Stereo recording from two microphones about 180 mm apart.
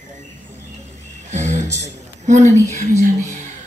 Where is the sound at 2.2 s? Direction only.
40° right (ahead or behind).